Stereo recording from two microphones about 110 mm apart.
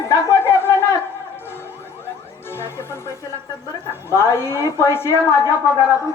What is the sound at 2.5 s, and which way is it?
Music, 20° left (ahead or behind).